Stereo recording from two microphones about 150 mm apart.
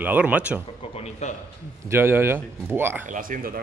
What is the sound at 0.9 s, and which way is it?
Speech, 45° left (ahead or behind).